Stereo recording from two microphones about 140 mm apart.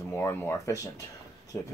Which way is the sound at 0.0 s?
15° left (ahead or behind).